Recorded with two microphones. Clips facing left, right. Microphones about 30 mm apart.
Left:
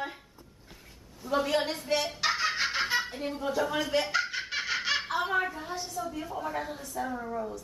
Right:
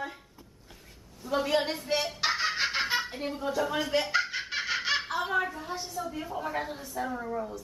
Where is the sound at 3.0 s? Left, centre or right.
Centre.